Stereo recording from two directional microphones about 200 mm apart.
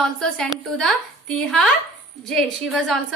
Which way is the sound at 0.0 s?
5° left (ahead or behind).